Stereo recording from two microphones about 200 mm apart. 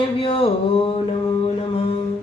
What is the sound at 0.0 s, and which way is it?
Speech, 25° left (ahead or behind).